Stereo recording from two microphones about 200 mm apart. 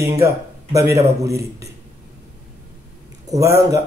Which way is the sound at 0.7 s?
15° right (ahead or behind).